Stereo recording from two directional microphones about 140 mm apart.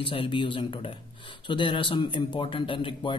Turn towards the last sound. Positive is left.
turn(degrees=35)  # may be behind; listen again after turning